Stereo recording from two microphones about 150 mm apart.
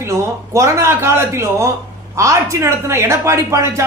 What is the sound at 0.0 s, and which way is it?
A woman's voice, 20° right (ahead or behind).